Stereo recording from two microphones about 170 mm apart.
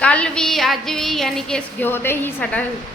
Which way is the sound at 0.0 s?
5° left (ahead or behind).